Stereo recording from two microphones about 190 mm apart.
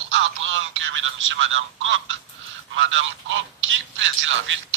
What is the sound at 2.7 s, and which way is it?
Speech, 90° right.